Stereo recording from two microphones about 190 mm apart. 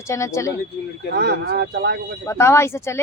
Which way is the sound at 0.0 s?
15° left (ahead or behind).